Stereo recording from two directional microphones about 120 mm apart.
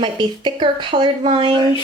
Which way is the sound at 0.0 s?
40° right (ahead or behind).